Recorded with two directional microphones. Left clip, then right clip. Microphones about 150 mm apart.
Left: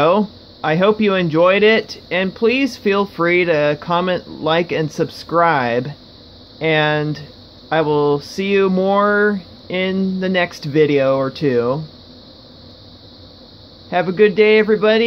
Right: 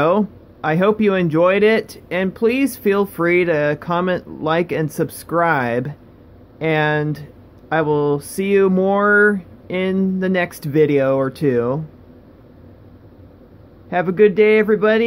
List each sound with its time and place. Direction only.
0.0 s speech: 20° right (ahead or behind)
13.8 s speech: 20° right (ahead or behind)